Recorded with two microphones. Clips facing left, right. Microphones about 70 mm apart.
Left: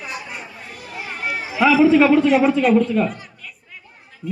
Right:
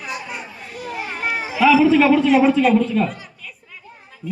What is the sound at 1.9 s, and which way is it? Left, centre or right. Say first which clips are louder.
Speech: left 1 dB; centre.